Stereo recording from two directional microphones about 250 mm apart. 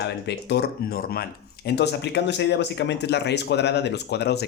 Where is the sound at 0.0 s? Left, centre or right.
Left.